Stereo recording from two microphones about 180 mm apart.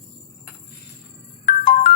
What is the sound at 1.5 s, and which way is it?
Ringtone, 45° left (ahead or behind).